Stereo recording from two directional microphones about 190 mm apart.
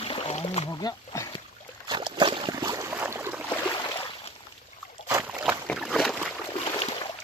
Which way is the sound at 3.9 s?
30° left (ahead or behind).